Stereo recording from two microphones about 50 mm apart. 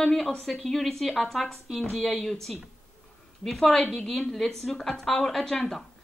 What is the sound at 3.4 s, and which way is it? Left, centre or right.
A woman's voice, centre.